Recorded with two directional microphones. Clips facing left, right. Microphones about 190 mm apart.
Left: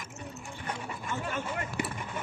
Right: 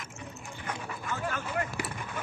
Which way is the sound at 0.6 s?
25° left (ahead or behind).